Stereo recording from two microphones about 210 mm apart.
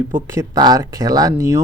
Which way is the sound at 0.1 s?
15° right (ahead or behind).